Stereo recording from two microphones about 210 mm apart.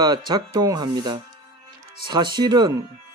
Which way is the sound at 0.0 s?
20° right (ahead or behind).